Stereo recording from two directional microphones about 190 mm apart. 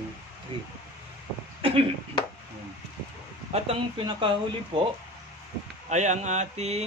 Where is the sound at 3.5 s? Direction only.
30° right (ahead or behind).